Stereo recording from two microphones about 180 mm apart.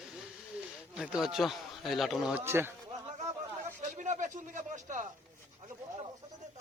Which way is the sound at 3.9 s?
45° right (ahead or behind).